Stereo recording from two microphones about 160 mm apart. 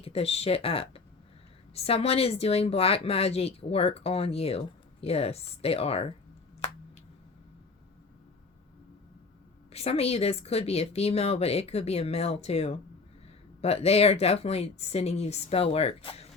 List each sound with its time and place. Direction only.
0.0 s speech: 40° left (ahead or behind)
9.7 s speech: 40° left (ahead or behind)